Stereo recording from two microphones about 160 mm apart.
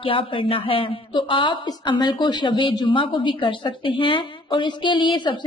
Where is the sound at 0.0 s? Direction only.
35° left (ahead or behind).